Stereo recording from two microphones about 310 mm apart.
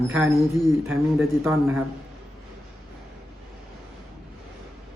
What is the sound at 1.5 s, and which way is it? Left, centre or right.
Speech, centre.